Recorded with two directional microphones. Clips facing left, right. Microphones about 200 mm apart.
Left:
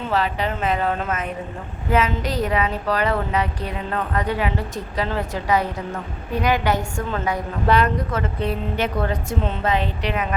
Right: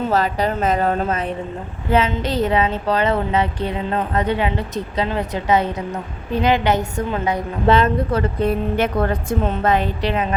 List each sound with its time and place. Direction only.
0.1 s a woman's voice: 40° right (ahead or behind); by 8.2 s 25° right (ahead or behind)
8.4 s a woman's voice: 50° right (ahead or behind)
10.0 s a woman's voice: 30° right (ahead or behind)